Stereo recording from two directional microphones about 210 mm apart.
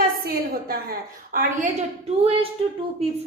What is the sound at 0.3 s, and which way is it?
A woman's voice, 45° right (ahead or behind).